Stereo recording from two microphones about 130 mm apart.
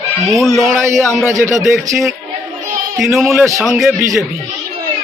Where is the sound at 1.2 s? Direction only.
25° right (ahead or behind).